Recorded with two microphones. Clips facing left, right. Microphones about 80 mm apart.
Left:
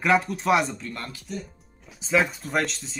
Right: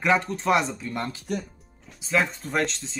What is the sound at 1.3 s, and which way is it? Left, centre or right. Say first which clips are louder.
Speech: right 4 dB; right.